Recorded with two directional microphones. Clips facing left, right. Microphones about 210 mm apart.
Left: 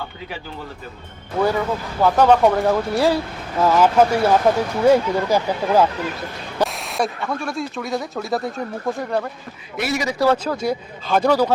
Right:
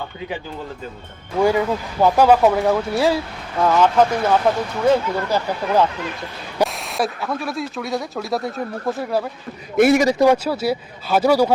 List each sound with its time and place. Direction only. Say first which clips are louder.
1.4 s speech: right 2 dB; 10° right (ahead or behind); by 5.9 s 10° left (ahead or behind)
6.6 s a sound: right 1 dB; 10° right (ahead or behind)
6.9 s speech: even; centre (ahead or behind)
9.7 s a man's voice: right 10 dB; 50° right (ahead or behind)
10.2 s speech: right 3 dB; 10° right (ahead or behind)